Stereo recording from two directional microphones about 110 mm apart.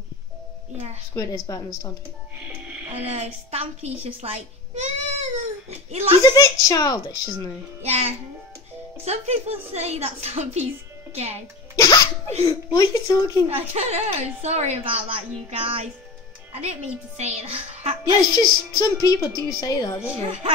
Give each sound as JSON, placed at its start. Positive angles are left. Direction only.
{"t": 1.1, "sound": "a woman's voice", "side_deg": 30}
{"t": 2.4, "sound": "music", "side_deg": -15}
{"t": 3.1, "sound": "a child's voice", "side_deg": -75}
{"t": 6.3, "sound": "a woman's voice", "side_deg": 30}
{"t": 7.8, "sound": "a woman's voice", "side_deg": -70}
{"t": 11.1, "sound": "a woman's voice", "side_deg": -75}
{"t": 11.7, "sound": "music", "side_deg": 30}
{"t": 12.7, "sound": "a woman's voice", "side_deg": 30}
{"t": 13.5, "sound": "a woman's voice", "side_deg": -75}
{"t": 17.2, "sound": "a woman's voice", "side_deg": -75}
{"t": 18.0, "sound": "a woman's voice", "side_deg": 35}